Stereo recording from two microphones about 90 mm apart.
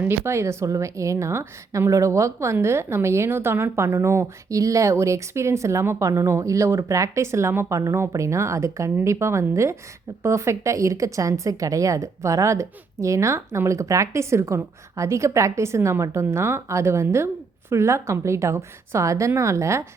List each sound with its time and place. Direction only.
0.0 s a woman's voice: 25° right (ahead or behind)